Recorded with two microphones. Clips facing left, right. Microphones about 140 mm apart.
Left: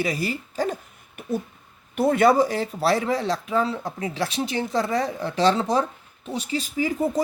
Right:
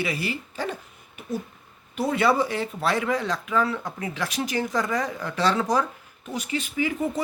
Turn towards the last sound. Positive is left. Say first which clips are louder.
# left 2 dB
turn(degrees=35)  # may be behind; listen again after turning